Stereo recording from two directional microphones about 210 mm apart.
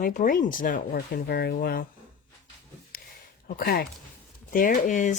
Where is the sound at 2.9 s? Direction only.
45° left (ahead or behind).